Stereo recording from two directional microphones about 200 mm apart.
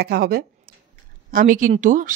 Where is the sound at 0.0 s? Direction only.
50° right (ahead or behind).